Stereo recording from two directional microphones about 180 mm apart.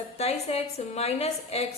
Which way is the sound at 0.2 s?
35° left (ahead or behind).